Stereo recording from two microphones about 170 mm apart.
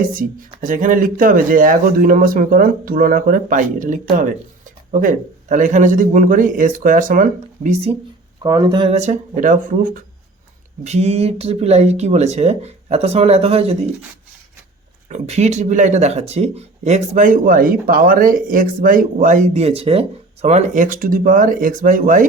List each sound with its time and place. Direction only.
0.1 s speech: 55° right (ahead or behind)
8.4 s speech: 25° right (ahead or behind)
9.0 s speech: 45° right (ahead or behind)
10.8 s speech: 40° right (ahead or behind)
15.1 s speech: 40° right (ahead or behind)